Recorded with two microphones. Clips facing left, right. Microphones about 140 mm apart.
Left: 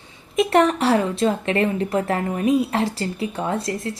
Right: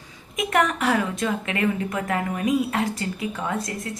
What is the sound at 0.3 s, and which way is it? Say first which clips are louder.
A woman's voice: left 6 dB; 30° left (ahead or behind).